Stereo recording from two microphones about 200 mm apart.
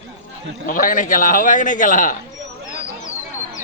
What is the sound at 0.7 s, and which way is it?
A man's voice, 45° left (ahead or behind).